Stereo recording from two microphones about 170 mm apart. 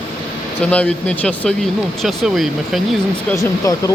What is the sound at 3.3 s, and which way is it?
Speech, 20° left (ahead or behind).